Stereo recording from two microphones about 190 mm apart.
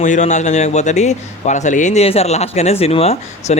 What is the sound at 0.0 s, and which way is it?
A man's voice, 40° left (ahead or behind).